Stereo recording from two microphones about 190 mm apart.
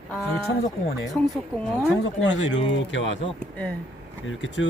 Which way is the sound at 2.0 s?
70° left (ahead or behind).